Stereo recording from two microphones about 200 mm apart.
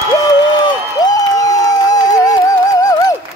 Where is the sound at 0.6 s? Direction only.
20° left (ahead or behind).